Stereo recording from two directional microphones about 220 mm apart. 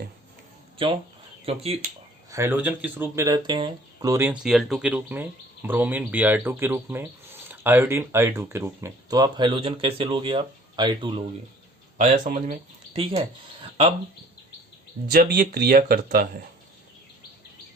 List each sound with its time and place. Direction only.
1.5 s speech: 25° right (ahead or behind)
2.3 s speech: 10° right (ahead or behind)
11.9 s speech: 35° right (ahead or behind)
15.1 s speech: 45° right (ahead or behind)